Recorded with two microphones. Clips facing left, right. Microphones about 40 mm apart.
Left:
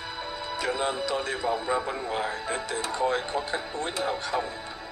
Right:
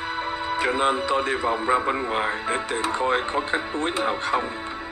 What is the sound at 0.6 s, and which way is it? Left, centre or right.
Speech, right.